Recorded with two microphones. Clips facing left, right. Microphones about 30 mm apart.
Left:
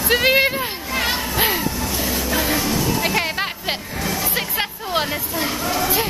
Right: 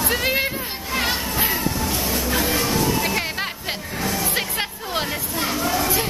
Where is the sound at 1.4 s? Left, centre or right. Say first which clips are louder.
Left 3 dB; left.